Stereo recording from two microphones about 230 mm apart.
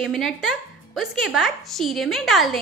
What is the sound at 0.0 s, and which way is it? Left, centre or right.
A child's voice, centre.